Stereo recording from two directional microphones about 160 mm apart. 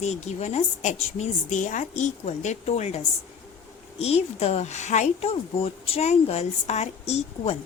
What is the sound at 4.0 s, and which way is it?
A woman's voice, 40° left (ahead or behind).